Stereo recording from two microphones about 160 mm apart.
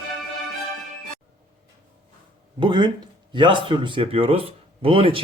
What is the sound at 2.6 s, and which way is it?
Speech, 30° right (ahead or behind).